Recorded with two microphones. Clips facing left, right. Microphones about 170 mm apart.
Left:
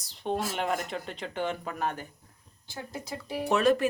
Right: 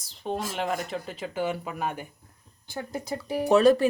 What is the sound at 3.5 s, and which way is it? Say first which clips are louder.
Speech: right 5 dB; 35° right (ahead or behind).